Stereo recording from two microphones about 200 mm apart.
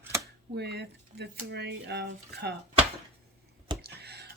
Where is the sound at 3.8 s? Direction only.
55° right (ahead or behind).